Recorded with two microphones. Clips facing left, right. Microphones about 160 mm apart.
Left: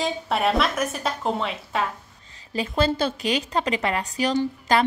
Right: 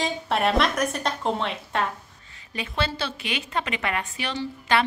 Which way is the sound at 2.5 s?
40° left (ahead or behind).